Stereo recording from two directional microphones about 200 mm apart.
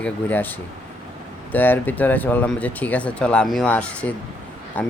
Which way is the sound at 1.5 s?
10° left (ahead or behind).